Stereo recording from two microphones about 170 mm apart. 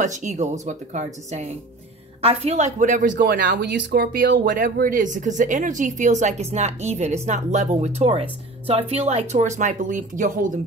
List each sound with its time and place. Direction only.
0.0 s speech: 45° right (ahead or behind)